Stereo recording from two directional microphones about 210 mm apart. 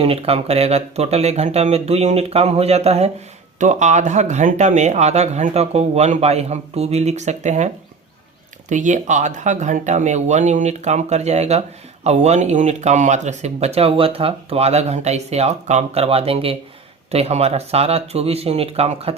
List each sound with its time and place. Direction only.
0.0 s speech: 30° right (ahead or behind)
8.7 s speech: 35° right (ahead or behind)